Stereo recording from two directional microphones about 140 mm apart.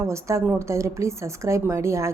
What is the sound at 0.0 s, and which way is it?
A woman's voice, 20° right (ahead or behind).